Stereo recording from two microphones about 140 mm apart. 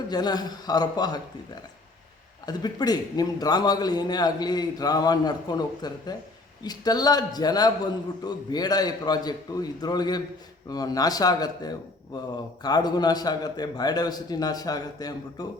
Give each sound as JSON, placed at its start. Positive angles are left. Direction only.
{"t": 0.1, "sound": "a man's voice", "side_deg": 30}
{"t": 2.5, "sound": "a man's voice", "side_deg": 30}